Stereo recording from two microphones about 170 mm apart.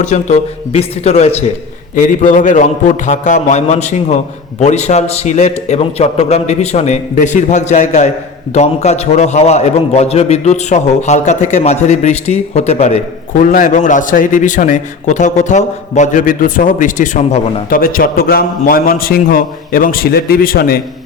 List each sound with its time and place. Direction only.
0.0 s a man's voice: 40° left (ahead or behind)
2.0 s a man's voice: 50° left (ahead or behind)